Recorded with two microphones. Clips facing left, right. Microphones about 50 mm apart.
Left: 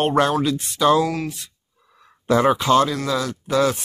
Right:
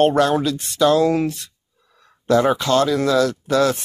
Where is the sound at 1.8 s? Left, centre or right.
Centre.